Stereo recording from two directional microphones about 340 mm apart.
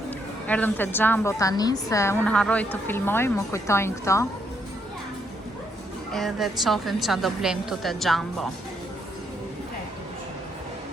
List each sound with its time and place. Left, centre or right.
0.4 s a woman's voice: centre
6.1 s a woman's voice: centre